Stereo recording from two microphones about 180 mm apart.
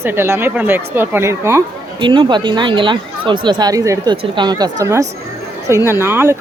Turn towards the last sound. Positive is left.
turn(degrees=-15)  # may be behind; listen again after turning